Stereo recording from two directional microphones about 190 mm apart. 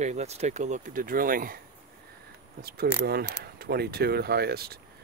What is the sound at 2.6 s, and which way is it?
Speech, 55° right (ahead or behind).